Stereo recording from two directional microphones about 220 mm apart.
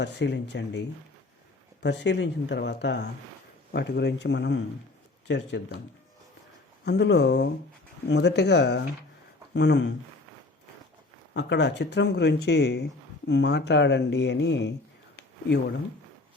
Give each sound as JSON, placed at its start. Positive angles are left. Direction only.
{"t": 0.0, "sound": "speech", "side_deg": 50}
{"t": 6.8, "sound": "speech", "side_deg": 50}
{"t": 11.3, "sound": "speech", "side_deg": 55}